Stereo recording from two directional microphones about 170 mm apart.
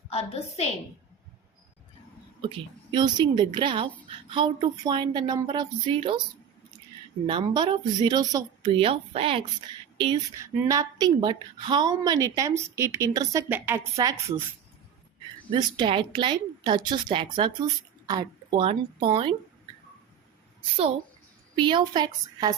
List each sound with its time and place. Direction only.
0.1 s a woman's voice: 35° left (ahead or behind)
2.9 s a woman's voice: 25° right (ahead or behind)
7.3 s a woman's voice: 25° right (ahead or behind)
8.6 s speech: 35° right (ahead or behind)
10.3 s a woman's voice: 15° right (ahead or behind)
15.4 s a woman's voice: 25° right (ahead or behind)
21.5 s a woman's voice: 25° right (ahead or behind)